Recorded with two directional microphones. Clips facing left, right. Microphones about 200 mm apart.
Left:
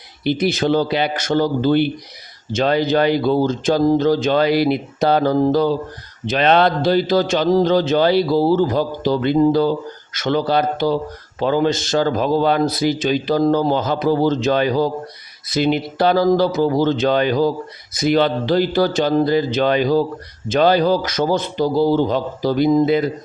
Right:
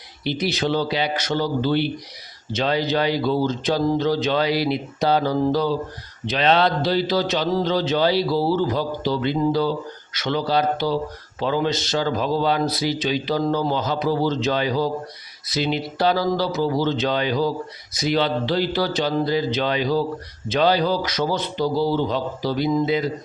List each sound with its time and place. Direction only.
0.3 s speech: 50° left (ahead or behind)